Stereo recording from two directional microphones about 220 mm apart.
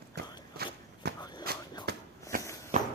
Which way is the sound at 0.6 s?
45° right (ahead or behind).